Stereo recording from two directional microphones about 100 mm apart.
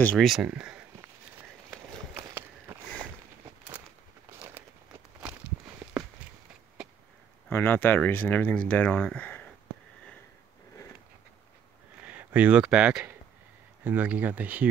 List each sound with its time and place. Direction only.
0.2 s speech: 5° right (ahead or behind)
2.1 s a sound: 30° right (ahead or behind)
5.8 s walk: 10° right (ahead or behind)
7.4 s speech: 20° left (ahead or behind)
12.0 s speech: 15° right (ahead or behind)